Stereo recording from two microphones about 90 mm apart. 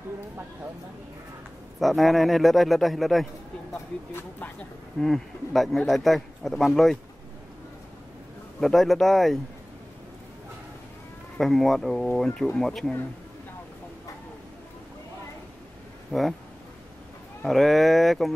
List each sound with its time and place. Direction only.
1.8 s speech: centre (ahead or behind)
3.7 s speech: 25° left (ahead or behind)
5.0 s speech: centre (ahead or behind)
8.5 s speech: centre (ahead or behind)
11.3 s speech: centre (ahead or behind)
16.1 s speech: centre (ahead or behind)
17.5 s speech: centre (ahead or behind)